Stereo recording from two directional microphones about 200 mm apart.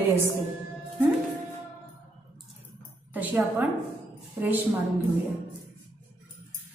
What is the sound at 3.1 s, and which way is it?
Speech, 10° right (ahead or behind).